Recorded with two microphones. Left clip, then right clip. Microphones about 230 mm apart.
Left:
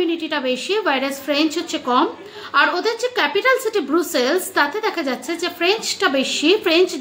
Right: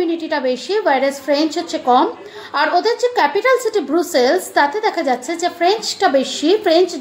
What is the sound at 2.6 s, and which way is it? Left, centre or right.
A woman's voice, centre.